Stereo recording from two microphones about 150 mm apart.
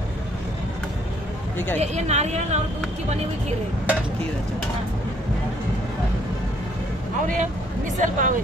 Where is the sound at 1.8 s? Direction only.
50° right (ahead or behind).